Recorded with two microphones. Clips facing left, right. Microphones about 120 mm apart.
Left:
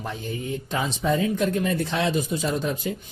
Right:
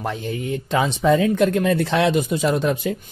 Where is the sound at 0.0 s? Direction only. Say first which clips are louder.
Right 5 dB; 80° right.